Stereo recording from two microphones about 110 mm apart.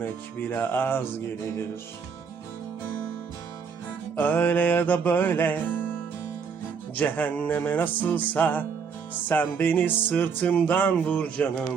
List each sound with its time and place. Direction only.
0.0 s music: 15° left (ahead or behind)
4.2 s music: 15° left (ahead or behind)
6.9 s music: 15° left (ahead or behind)